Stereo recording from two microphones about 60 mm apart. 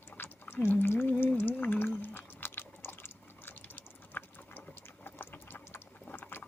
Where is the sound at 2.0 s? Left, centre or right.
Left.